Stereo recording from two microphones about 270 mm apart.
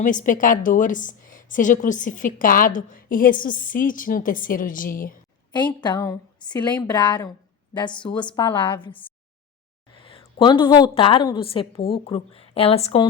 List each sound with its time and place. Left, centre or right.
0.0 s a woman's voice: left
5.5 s a woman's voice: centre
9.9 s a woman's voice: centre